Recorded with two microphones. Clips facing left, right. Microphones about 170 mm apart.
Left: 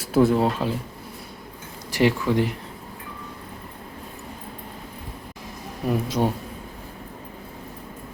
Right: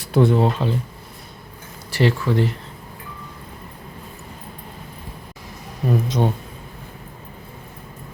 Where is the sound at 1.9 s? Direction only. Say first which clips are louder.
Right 1 dB; 15° left (ahead or behind).